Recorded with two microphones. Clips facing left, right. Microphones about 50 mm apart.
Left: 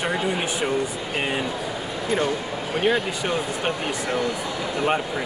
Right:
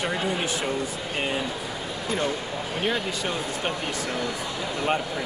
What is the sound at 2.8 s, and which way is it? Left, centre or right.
Speech, centre.